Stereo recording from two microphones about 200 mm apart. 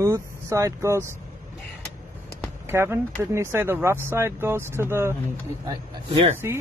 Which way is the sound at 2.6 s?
10° right (ahead or behind).